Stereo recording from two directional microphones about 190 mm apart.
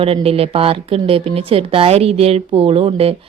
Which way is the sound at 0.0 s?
30° right (ahead or behind).